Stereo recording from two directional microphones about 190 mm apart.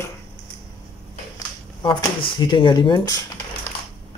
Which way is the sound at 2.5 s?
25° left (ahead or behind).